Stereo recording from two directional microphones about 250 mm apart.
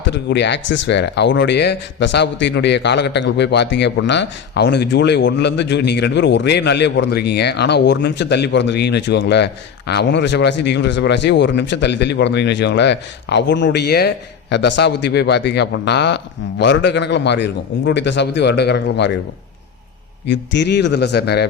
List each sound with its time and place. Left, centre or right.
0.1 s a man's voice: left
20.2 s a man's voice: left